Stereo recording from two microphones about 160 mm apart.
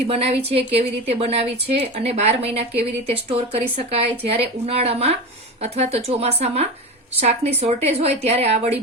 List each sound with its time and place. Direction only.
0.1 s a woman's voice: 40° right (ahead or behind)